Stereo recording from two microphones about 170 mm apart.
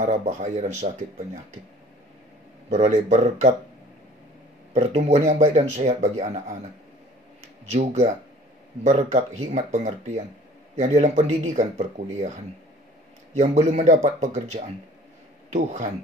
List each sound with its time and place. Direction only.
0.0 s speech: 45° right (ahead or behind)
2.7 s speech: 40° right (ahead or behind)
4.7 s speech: 40° right (ahead or behind)
7.6 s speech: 40° right (ahead or behind)
13.3 s speech: 40° right (ahead or behind)